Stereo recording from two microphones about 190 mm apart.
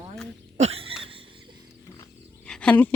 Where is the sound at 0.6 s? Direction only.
30° right (ahead or behind).